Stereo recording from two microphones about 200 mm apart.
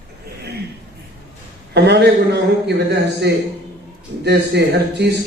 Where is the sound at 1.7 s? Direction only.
55° right (ahead or behind).